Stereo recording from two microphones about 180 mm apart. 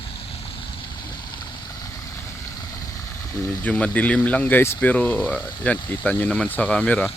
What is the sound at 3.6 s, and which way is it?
Speech, 5° left (ahead or behind).